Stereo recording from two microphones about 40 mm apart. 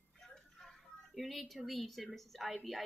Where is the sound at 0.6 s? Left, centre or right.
Centre.